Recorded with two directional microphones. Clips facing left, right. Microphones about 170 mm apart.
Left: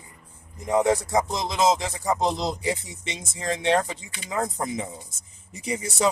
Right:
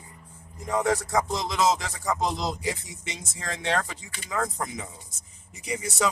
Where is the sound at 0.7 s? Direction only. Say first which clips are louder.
Left 4 dB; 20° left (ahead or behind).